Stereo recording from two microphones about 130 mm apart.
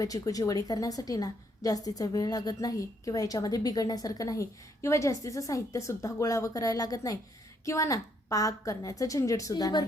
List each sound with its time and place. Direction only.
0.0 s a woman's voice: 25° left (ahead or behind)